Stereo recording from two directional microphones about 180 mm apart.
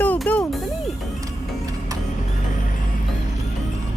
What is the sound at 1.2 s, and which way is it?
Music, 20° right (ahead or behind).